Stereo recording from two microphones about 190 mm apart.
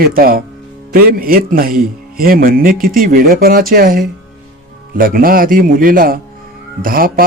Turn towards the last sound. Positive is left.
turn(degrees=-50)  # may be behind; listen again after turning